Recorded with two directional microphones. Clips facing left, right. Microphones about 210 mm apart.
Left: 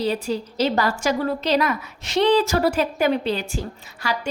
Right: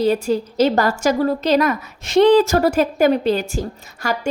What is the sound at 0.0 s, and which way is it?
A woman's voice, 45° right (ahead or behind).